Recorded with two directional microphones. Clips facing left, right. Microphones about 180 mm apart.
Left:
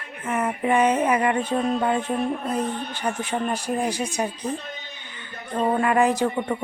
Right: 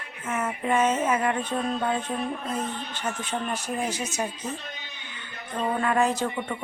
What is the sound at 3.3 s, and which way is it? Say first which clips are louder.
A woman's voice: left 4 dB; 10° left (ahead or behind).